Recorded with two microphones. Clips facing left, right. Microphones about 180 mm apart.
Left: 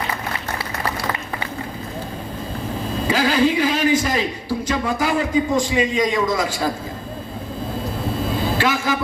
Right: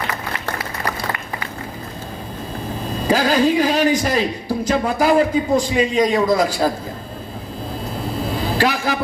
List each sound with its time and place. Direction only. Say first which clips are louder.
3.1 s a sound: right 2 dB; 40° right (ahead or behind)
4.7 s a man's voice: right 6 dB; 35° right (ahead or behind)
8.5 s vehicle: right 3 dB; 40° right (ahead or behind)